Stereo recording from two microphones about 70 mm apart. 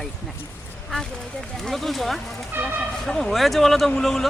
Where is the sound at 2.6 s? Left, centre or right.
Right.